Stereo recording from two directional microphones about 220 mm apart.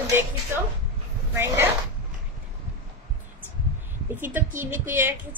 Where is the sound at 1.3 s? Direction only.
10° right (ahead or behind).